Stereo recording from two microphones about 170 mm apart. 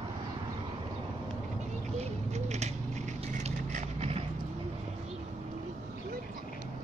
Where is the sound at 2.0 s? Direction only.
40° right (ahead or behind).